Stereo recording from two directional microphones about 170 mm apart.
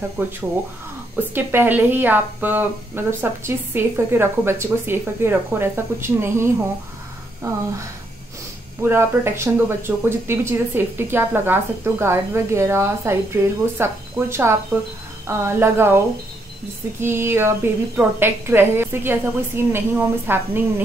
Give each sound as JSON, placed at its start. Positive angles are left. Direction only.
{"t": 0.2, "sound": "speech", "side_deg": -15}
{"t": 8.8, "sound": "speech", "side_deg": -15}
{"t": 17.0, "sound": "speech", "side_deg": -15}